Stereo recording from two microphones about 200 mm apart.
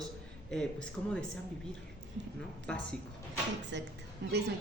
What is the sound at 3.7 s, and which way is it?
Speech, 65° right (ahead or behind).